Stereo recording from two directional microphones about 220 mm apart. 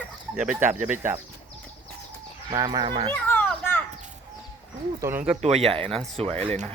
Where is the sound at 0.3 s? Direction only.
5° right (ahead or behind).